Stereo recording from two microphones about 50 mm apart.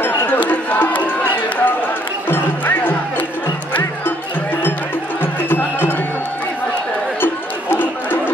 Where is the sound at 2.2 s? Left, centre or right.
Left.